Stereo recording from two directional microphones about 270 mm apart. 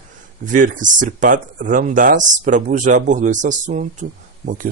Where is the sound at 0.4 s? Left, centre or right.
Right.